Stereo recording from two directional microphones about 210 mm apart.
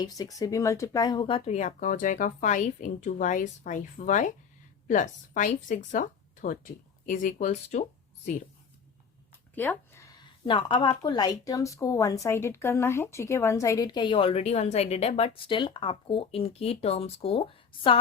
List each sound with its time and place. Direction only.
0.0 s speech: 15° left (ahead or behind); by 8.4 s 35° left (ahead or behind)
9.6 s speech: 10° left (ahead or behind)
10.4 s a woman's voice: 25° left (ahead or behind)